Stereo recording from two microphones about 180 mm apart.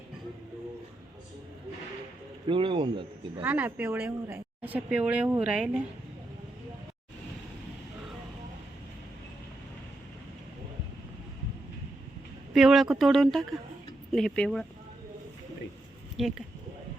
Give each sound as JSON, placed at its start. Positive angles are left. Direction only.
{"t": 2.5, "sound": "speech", "side_deg": -30}
{"t": 3.4, "sound": "speech", "side_deg": -10}
{"t": 12.5, "sound": "speech", "side_deg": 0}
{"t": 16.1, "sound": "speech", "side_deg": 0}